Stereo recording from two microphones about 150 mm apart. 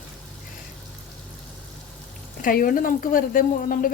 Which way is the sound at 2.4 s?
70° left (ahead or behind).